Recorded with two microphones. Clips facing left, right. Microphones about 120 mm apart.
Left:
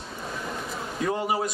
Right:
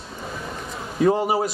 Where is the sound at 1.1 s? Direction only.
30° right (ahead or behind).